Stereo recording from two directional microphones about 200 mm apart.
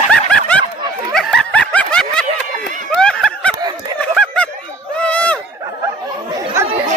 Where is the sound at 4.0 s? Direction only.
5° left (ahead or behind).